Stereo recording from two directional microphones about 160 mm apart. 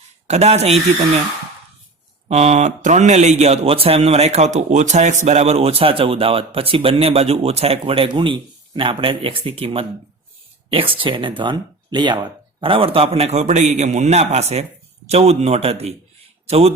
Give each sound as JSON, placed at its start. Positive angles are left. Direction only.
{"t": 0.3, "sound": "speech", "side_deg": -45}
{"t": 2.2, "sound": "speech", "side_deg": -45}